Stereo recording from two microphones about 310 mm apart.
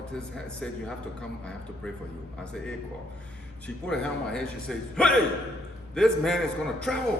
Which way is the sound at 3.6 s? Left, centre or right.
Centre.